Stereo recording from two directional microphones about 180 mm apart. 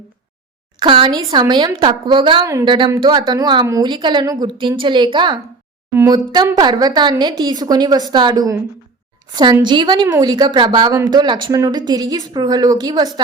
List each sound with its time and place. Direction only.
0.8 s a woman's voice: 30° right (ahead or behind)
5.9 s a woman's voice: 10° right (ahead or behind)